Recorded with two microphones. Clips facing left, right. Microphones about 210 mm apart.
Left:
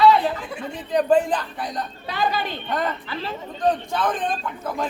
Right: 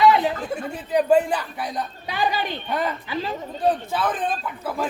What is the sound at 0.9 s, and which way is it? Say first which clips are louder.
A woman's voice: even; 10° right (ahead or behind).